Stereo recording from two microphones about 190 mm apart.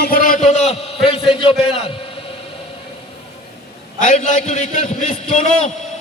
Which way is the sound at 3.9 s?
40° left (ahead or behind).